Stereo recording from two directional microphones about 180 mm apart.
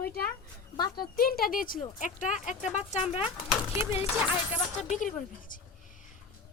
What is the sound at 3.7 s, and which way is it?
Speech, 15° right (ahead or behind).